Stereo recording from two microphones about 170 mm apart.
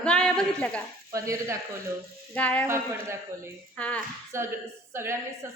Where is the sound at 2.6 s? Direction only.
15° right (ahead or behind).